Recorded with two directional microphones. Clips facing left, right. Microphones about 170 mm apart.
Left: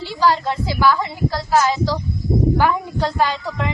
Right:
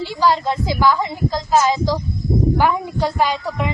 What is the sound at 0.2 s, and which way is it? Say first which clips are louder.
A woman's voice: even; 15° right (ahead or behind).